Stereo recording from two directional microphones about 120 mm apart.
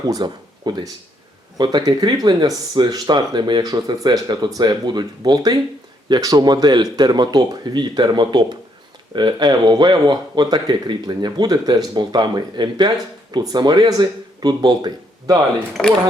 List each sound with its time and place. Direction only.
0.0 s speech: 35° right (ahead or behind)
15.8 s speech: 5° left (ahead or behind)